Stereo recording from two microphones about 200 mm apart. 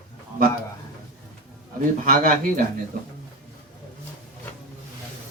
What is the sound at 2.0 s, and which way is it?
Speech, 40° right (ahead or behind).